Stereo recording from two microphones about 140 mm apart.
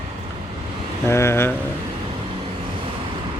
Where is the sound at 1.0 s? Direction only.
20° left (ahead or behind).